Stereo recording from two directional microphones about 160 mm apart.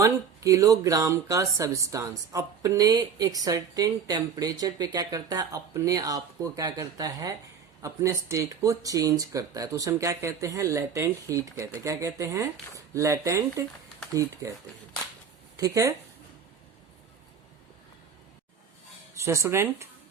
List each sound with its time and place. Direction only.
0.0 s speech: 20° right (ahead or behind)
15.5 s speech: 20° right (ahead or behind)
19.1 s speech: 20° right (ahead or behind)